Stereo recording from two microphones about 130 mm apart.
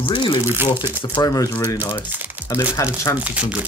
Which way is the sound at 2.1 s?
15° right (ahead or behind).